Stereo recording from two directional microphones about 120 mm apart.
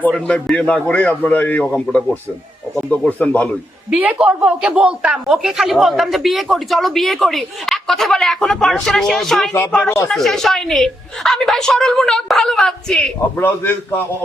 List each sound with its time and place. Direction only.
0.0 s a man's voice: 10° left (ahead or behind)
3.8 s speech: 15° right (ahead or behind); by 14.0 s 15° left (ahead or behind)